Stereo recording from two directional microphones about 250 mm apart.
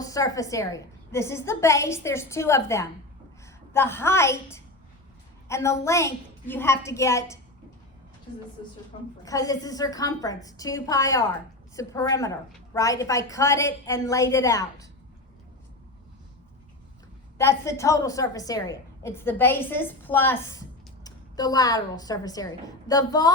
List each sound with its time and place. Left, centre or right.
0.0 s a woman's voice: centre
5.5 s a woman's voice: centre
9.2 s a woman's voice: centre
17.3 s a woman's voice: centre